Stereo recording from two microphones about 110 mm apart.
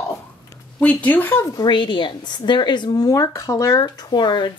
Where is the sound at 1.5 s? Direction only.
45° left (ahead or behind).